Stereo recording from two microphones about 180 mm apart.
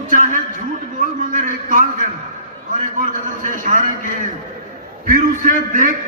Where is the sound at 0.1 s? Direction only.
45° right (ahead or behind).